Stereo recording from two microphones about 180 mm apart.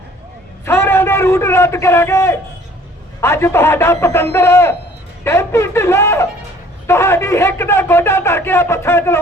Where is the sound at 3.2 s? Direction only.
15° left (ahead or behind).